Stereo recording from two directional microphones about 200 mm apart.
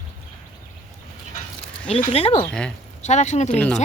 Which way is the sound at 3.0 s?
35° left (ahead or behind).